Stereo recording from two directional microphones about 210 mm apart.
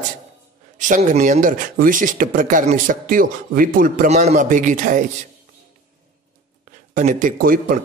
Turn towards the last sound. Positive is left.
turn(degrees=-40)  # may be behind; listen again after turning